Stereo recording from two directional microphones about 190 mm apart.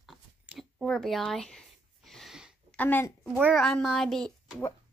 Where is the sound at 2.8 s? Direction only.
10° left (ahead or behind).